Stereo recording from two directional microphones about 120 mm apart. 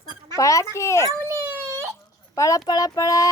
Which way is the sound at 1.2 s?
25° right (ahead or behind).